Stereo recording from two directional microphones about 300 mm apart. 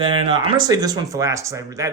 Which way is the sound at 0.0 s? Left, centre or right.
Centre.